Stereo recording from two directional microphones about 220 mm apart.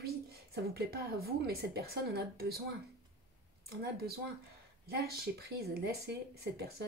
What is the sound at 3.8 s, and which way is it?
Speech, 45° right (ahead or behind).